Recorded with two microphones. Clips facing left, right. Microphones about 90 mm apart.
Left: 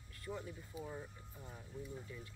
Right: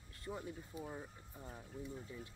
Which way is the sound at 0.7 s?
Centre (ahead or behind).